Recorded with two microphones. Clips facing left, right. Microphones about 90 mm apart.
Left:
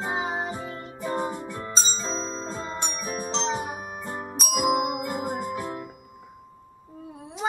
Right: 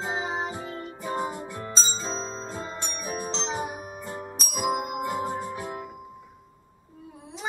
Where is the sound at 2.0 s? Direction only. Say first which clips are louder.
Left 2 dB; 15° right (ahead or behind).